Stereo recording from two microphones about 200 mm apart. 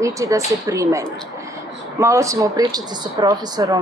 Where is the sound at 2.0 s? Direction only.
15° right (ahead or behind).